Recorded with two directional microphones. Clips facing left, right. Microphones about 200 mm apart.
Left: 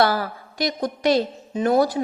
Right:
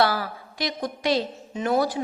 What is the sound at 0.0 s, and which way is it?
A woman's voice, 45° left (ahead or behind).